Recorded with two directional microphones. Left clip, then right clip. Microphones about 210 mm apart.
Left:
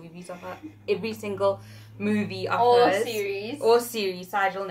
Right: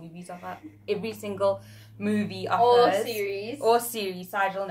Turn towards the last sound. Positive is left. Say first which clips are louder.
# left 1 dB
turn(degrees=-10)  # may be behind; listen again after turning